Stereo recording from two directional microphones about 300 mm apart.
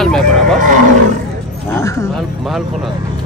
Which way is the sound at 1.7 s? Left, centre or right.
Centre.